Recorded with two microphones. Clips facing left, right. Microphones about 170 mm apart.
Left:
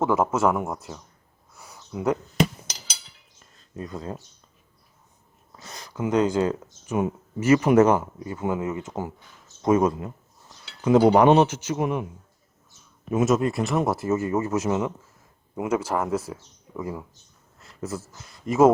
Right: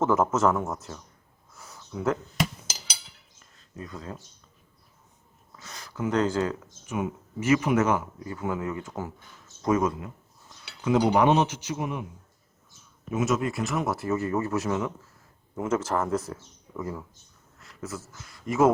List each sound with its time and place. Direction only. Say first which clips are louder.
0.0 s speech: left 1 dB; 10° left (ahead or behind)
1.5 s a sound: left 2 dB; 10° left (ahead or behind)
3.8 s speech: left 5 dB; 30° left (ahead or behind)
5.6 s speech: left 2 dB; 20° left (ahead or behind)
6.4 s speech: left 4 dB; 25° left (ahead or behind)
6.9 s speech: left 5 dB; 40° left (ahead or behind)
8.3 s speech: left 3 dB; 20° left (ahead or behind)
11.0 s a man's voice: left 5 dB; 50° left (ahead or behind)
13.1 s speech: left 5 dB; 35° left (ahead or behind); by 17.1 s 15° left (ahead or behind)
17.6 s speech: left 5 dB; 30° left (ahead or behind)